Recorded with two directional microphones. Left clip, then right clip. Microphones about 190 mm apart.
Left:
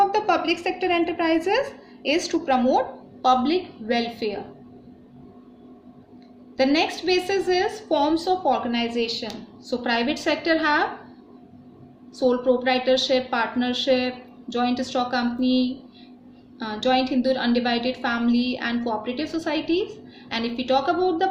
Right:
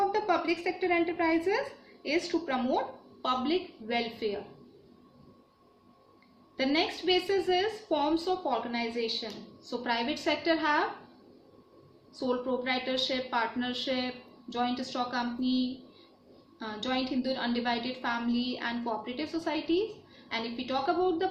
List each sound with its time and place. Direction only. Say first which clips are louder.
0.1 s a woman's voice: left 7 dB; 45° left (ahead or behind)
6.6 s a woman's voice: left 8 dB; 40° left (ahead or behind)
12.6 s a woman's voice: left 10 dB; 35° left (ahead or behind)